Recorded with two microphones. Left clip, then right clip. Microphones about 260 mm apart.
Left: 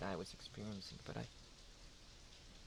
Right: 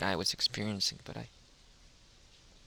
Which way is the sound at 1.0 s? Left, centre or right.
Right.